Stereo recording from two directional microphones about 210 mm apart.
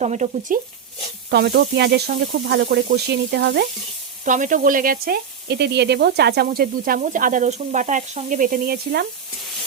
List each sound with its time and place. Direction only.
0.0 s frying: 35° right (ahead or behind)
1.3 s speech: 50° right (ahead or behind)
4.3 s speech: 40° right (ahead or behind)